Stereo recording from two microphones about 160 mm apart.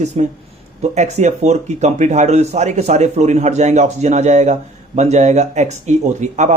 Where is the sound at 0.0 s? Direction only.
50° right (ahead or behind).